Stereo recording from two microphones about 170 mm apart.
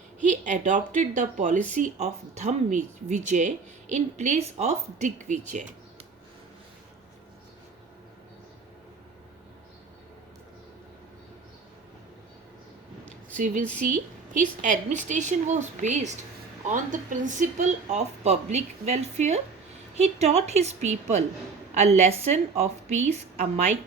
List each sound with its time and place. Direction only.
0.2 s speech: 45° right (ahead or behind)
13.3 s a woman's voice: 50° right (ahead or behind)